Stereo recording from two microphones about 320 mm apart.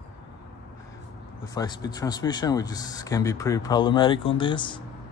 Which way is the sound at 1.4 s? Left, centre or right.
Centre.